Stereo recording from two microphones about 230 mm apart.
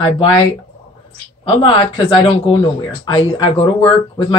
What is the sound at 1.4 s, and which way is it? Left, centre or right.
Speech, left.